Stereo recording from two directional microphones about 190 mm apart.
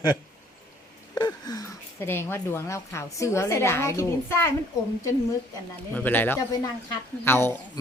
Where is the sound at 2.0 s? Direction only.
10° left (ahead or behind).